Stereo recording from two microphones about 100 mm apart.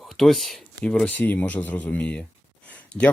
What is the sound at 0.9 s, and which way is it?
Speech, 15° left (ahead or behind).